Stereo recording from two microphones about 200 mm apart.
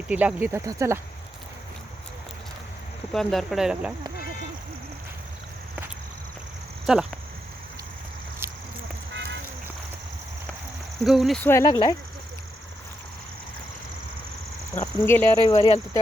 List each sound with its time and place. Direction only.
0.1 s speech: 5° right (ahead or behind)
3.1 s speech: centre (ahead or behind)
6.9 s speech: centre (ahead or behind)
9.1 s a sound: 60° right (ahead or behind)
11.0 s speech: centre (ahead or behind)
11.4 s speech: 15° left (ahead or behind)
14.8 s speech: 10° left (ahead or behind)
15.5 s speech: 25° left (ahead or behind)